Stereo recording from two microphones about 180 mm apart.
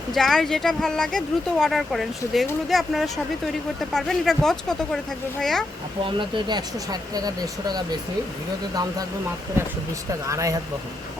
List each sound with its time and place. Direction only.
0.1 s speech: 5° left (ahead or behind)
6.1 s speech: 25° right (ahead or behind)
10.1 s speech: 15° right (ahead or behind)